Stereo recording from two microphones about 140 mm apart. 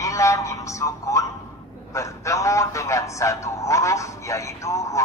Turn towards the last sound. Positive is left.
turn(degrees=20)  # may be behind; listen again after turning